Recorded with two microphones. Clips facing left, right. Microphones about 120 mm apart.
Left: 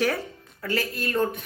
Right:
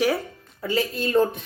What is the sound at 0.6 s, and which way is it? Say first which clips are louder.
Speech: right 4 dB; 20° right (ahead or behind).